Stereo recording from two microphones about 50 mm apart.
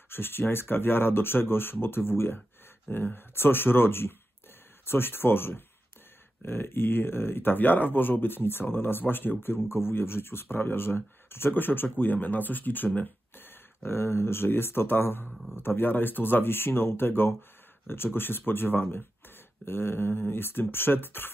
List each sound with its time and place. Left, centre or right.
0.1 s speech: left
13.5 s speech: left